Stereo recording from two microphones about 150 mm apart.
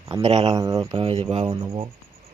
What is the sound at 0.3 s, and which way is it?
Speech, 45° right (ahead or behind).